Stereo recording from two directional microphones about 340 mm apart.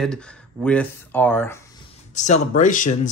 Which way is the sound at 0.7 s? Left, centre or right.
Centre.